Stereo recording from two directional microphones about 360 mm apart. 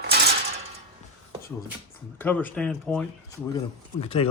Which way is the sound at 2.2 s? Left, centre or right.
Centre.